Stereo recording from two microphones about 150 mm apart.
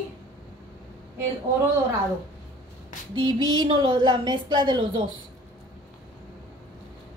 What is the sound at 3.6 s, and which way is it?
A woman's voice, 30° right (ahead or behind).